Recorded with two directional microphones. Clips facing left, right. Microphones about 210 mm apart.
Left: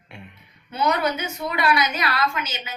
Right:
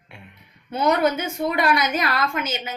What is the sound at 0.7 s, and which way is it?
A woman's voice, 50° right (ahead or behind).